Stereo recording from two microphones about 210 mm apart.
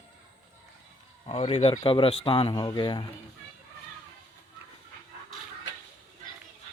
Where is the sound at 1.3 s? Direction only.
25° left (ahead or behind).